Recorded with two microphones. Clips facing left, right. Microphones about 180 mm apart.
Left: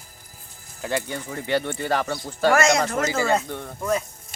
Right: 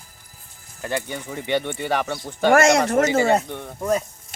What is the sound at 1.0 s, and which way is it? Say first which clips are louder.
Speech: right 1 dB; 15° right (ahead or behind).